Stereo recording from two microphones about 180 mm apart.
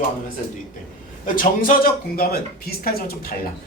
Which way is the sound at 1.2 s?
50° left (ahead or behind).